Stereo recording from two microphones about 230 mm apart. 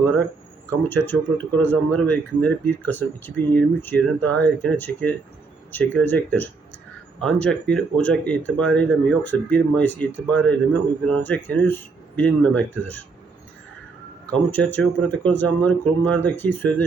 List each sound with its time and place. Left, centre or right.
0.9 s speech: centre
14.3 s speech: centre